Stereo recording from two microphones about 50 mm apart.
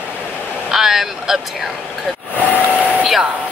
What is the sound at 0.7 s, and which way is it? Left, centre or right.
Speech, centre.